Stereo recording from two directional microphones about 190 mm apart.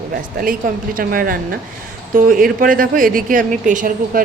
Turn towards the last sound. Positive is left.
turn(degrees=-45)  # may be behind; listen again after turning